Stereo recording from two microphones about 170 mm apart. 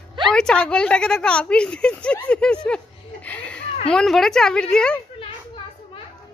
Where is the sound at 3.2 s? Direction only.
10° left (ahead or behind).